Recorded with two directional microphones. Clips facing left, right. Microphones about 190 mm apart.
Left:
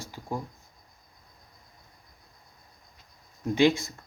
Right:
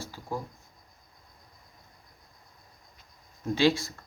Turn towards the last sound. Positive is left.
turn(degrees=20)  # may be behind; listen again after turning